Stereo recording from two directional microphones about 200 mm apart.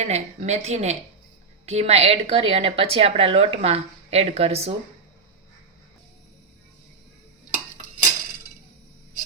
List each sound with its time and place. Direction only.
0.0 s a woman's voice: 35° right (ahead or behind)